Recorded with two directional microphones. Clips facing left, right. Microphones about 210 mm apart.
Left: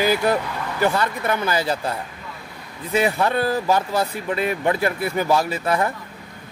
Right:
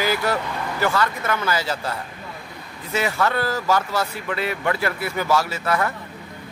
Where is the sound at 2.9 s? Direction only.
20° left (ahead or behind).